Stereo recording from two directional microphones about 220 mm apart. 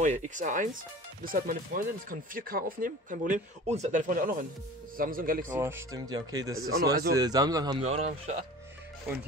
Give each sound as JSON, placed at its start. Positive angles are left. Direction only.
{"t": 0.0, "sound": "speech", "side_deg": -35}
{"t": 5.6, "sound": "speech", "side_deg": -10}
{"t": 6.5, "sound": "speech", "side_deg": -70}
{"t": 7.2, "sound": "speech", "side_deg": -15}
{"t": 7.8, "sound": "speech", "side_deg": -30}